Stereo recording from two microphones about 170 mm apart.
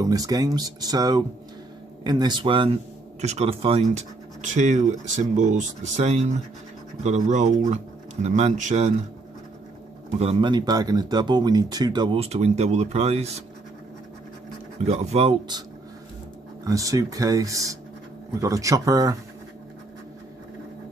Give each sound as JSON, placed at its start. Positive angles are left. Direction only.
{"t": 0.0, "sound": "speech", "side_deg": -20}
{"t": 10.1, "sound": "speech", "side_deg": -30}
{"t": 14.9, "sound": "speech", "side_deg": -35}
{"t": 16.6, "sound": "speech", "side_deg": -20}